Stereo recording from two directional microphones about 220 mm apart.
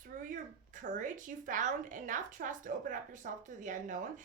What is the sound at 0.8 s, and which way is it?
A woman's voice, 35° right (ahead or behind).